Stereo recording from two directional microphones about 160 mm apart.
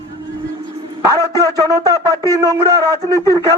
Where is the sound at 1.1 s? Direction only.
20° right (ahead or behind).